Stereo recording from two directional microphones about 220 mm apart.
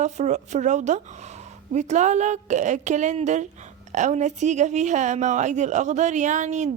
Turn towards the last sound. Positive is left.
turn(degrees=-30)  # may be behind; listen again after turning